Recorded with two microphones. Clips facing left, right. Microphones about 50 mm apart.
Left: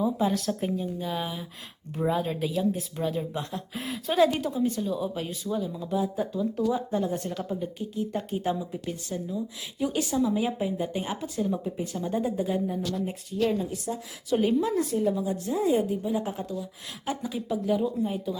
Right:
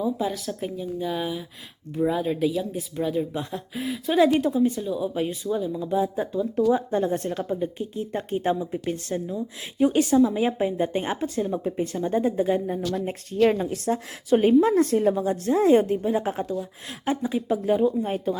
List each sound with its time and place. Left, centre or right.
0.0 s speech: centre
4.4 s speech: right
4.8 s speech: centre
5.1 s speech: right
5.5 s speech: centre
5.9 s a woman's voice: right
12.9 s speech: right
14.3 s a woman's voice: right
14.8 s a woman's voice: right
17.1 s a woman's voice: right
18.0 s a woman's voice: right